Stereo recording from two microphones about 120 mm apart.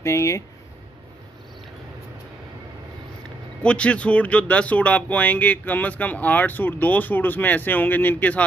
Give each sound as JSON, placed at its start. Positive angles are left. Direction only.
{"t": 0.0, "sound": "speech", "side_deg": 25}
{"t": 3.6, "sound": "speech", "side_deg": 10}